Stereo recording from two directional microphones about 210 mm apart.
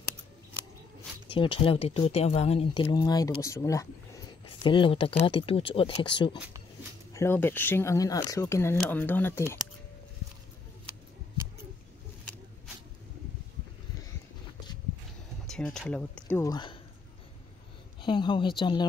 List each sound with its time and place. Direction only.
1.3 s speech: 25° left (ahead or behind)
7.2 s speech: 10° left (ahead or behind)
15.4 s speech: 5° left (ahead or behind); by 16.7 s 20° left (ahead or behind)
18.0 s speech: 20° left (ahead or behind)